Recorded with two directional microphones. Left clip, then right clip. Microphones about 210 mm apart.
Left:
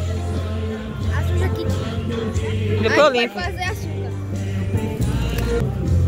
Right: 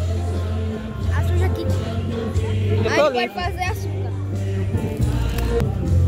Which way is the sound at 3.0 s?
10° left (ahead or behind).